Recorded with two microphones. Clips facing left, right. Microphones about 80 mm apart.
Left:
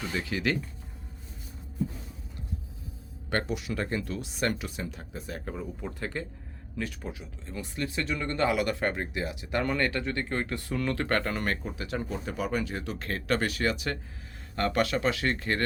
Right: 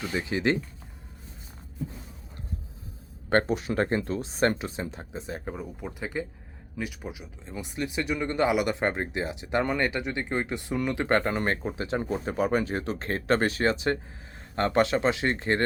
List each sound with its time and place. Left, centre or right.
0.0 s speech: right
3.2 s speech: right